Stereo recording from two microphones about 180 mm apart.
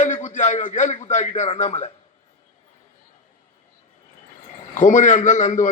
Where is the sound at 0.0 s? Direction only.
40° left (ahead or behind).